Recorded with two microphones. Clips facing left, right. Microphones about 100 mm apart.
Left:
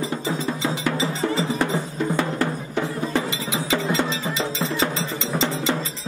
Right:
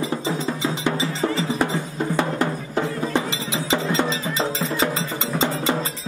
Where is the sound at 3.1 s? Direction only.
20° right (ahead or behind).